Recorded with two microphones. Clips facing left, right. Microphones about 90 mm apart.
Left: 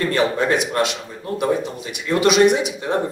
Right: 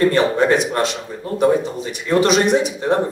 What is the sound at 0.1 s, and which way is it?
Speech, 35° right (ahead or behind).